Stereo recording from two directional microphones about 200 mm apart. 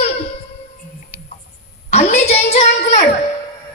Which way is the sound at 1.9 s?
35° left (ahead or behind).